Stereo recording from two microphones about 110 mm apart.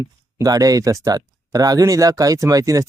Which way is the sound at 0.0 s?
30° right (ahead or behind).